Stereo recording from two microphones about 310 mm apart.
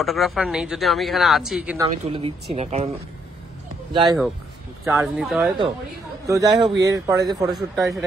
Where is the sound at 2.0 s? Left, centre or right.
Centre.